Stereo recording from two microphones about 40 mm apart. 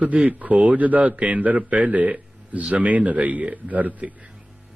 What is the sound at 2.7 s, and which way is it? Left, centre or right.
A man's voice, right.